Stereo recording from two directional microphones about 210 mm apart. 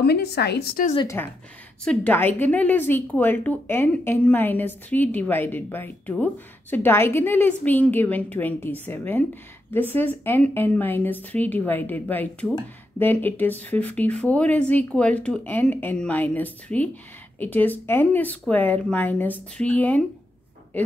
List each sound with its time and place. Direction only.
0.0 s a woman's voice: 50° left (ahead or behind)
0.9 s a woman's voice: 15° left (ahead or behind)